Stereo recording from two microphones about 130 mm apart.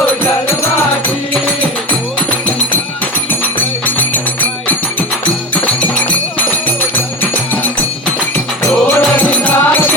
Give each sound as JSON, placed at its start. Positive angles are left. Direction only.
{"t": 3.8, "sound": "music", "side_deg": 15}
{"t": 5.6, "sound": "music", "side_deg": 10}
{"t": 9.0, "sound": "music", "side_deg": 10}